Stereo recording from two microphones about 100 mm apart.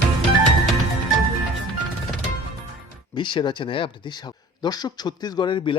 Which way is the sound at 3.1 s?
55° left (ahead or behind).